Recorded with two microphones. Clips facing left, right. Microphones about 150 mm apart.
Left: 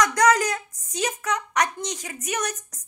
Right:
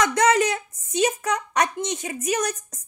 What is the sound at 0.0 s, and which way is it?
A woman's voice, 25° right (ahead or behind).